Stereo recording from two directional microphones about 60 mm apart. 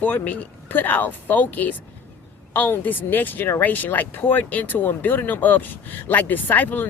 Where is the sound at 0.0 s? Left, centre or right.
Left.